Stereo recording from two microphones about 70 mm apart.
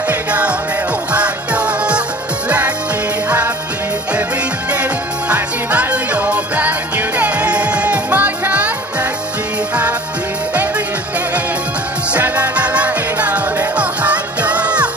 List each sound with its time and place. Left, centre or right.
0.1 s music: centre
3.3 s music: right
4.6 s music: right
12.1 s music: centre